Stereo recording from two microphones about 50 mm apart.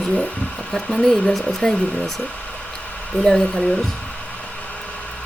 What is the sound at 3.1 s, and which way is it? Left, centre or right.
Speech, left.